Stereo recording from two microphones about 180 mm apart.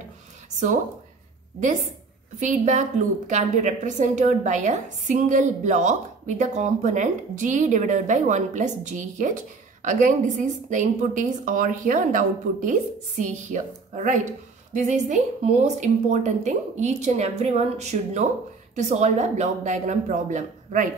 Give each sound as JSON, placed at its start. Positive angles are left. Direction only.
{"t": 2.4, "sound": "a woman's voice", "side_deg": -45}